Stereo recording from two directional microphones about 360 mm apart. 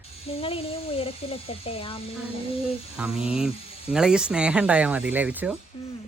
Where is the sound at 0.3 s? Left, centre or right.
Centre.